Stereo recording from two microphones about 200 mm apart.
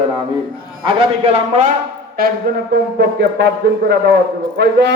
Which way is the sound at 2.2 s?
50° right (ahead or behind).